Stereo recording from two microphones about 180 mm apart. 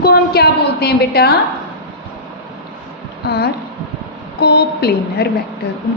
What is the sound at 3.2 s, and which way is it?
A woman's voice, 65° left (ahead or behind).